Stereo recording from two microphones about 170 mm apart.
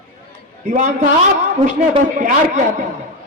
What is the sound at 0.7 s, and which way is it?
Speech, 45° right (ahead or behind).